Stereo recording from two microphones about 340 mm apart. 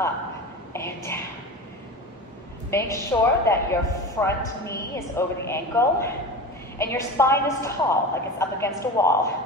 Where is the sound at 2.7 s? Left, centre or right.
Centre.